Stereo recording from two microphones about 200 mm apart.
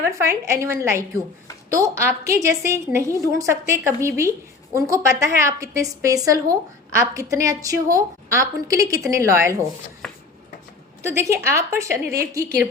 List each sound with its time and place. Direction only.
0.0 s a woman's voice: 15° right (ahead or behind)
10.0 s a sound: centre (ahead or behind)
11.0 s a woman's voice: 15° right (ahead or behind)